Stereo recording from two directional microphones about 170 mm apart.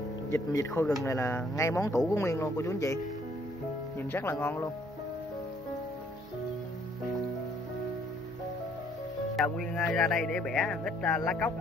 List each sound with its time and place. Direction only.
0.3 s speech: 20° left (ahead or behind)
4.1 s speech: 10° left (ahead or behind)
9.4 s speech: centre (ahead or behind)